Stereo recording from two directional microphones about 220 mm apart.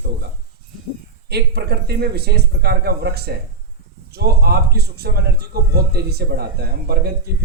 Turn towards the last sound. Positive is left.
turn(degrees=-45)  # may be behind; listen again after turning